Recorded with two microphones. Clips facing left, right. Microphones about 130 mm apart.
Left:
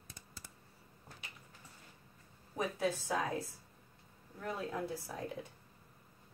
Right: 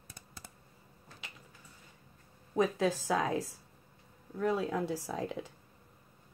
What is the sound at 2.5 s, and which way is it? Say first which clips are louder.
Speech: right 6 dB; 90° right.